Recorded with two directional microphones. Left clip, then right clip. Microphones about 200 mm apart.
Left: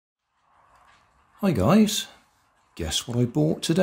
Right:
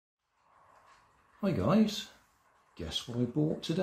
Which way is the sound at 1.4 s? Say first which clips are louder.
Left 8 dB; 50° left (ahead or behind).